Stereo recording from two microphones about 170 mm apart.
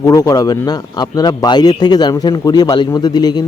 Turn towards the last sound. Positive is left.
turn(degrees=25)  # may be behind; listen again after turning